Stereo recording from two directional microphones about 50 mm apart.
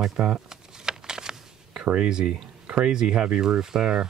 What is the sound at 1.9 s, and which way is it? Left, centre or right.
Speech, centre.